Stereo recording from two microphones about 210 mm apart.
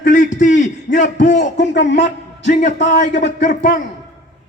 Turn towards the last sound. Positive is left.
turn(degrees=40)  # may be behind; listen again after turning